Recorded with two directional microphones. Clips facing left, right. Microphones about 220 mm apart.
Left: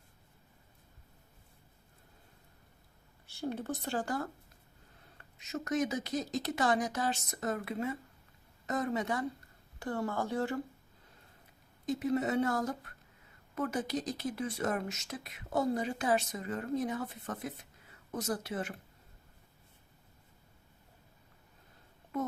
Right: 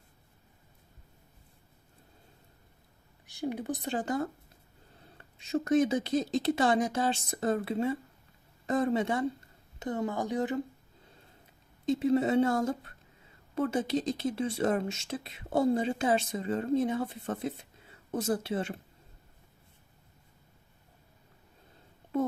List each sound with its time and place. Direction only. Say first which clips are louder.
3.2 s speech: right 3 dB; 15° right (ahead or behind)
5.1 s speech: right 8 dB; 30° right (ahead or behind)
11.9 s speech: right 5 dB; 25° right (ahead or behind)